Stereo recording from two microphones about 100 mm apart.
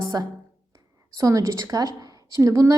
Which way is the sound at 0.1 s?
40° right (ahead or behind).